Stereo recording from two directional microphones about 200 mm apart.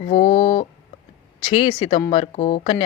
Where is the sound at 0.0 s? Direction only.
30° left (ahead or behind).